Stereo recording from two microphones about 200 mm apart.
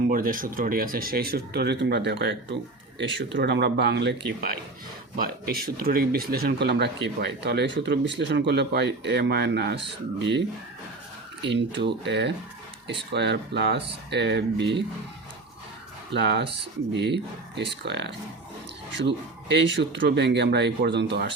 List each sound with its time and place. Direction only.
0.1 s speech: 45° right (ahead or behind); by 10.4 s 60° right (ahead or behind)
11.4 s speech: 60° right (ahead or behind)
16.1 s speech: 55° right (ahead or behind)